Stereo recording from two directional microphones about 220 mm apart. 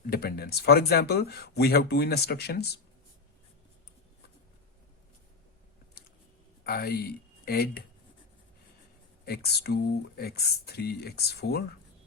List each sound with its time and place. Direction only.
0.1 s speech: 45° left (ahead or behind)
6.7 s speech: 45° left (ahead or behind)
9.2 s speech: 45° left (ahead or behind)